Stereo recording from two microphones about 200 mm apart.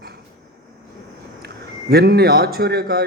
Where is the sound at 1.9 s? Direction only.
50° right (ahead or behind).